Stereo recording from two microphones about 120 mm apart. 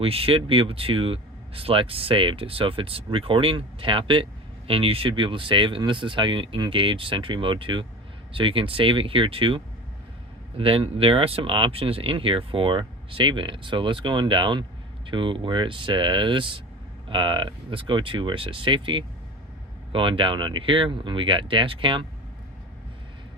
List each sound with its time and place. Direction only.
0.0 s speech: 50° right (ahead or behind)
10.6 s speech: 50° right (ahead or behind)